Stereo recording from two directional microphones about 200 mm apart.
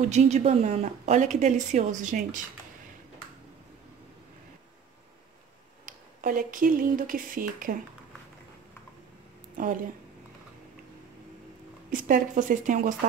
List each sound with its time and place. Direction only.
0.1 s a woman's voice: 35° right (ahead or behind)
5.9 s speech: 40° right (ahead or behind)
11.9 s a woman's voice: 40° right (ahead or behind)